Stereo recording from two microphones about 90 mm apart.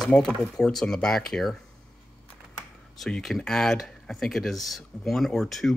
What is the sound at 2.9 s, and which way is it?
Speech, centre (ahead or behind).